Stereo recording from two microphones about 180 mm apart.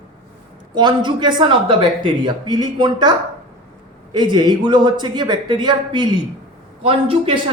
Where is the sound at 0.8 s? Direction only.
25° right (ahead or behind).